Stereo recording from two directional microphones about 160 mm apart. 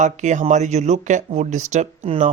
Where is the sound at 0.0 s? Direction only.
50° right (ahead or behind).